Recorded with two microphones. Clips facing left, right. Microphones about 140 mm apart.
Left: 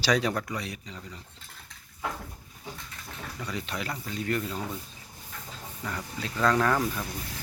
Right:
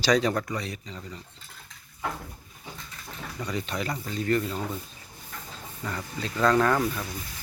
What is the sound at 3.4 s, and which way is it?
Speech, centre (ahead or behind).